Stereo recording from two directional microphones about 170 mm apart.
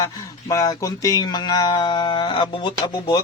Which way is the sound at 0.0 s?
20° left (ahead or behind).